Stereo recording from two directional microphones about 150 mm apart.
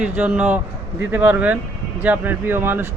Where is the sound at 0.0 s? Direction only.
10° right (ahead or behind).